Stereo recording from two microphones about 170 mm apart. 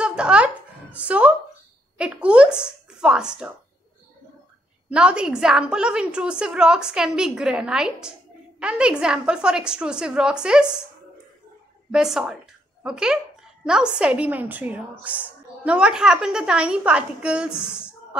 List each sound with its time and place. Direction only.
0.0 s a sound: 5° right (ahead or behind)
4.8 s a woman's voice: 5° right (ahead or behind)
11.9 s a woman's voice: 5° right (ahead or behind)